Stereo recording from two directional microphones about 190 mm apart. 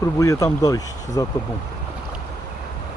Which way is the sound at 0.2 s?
15° left (ahead or behind).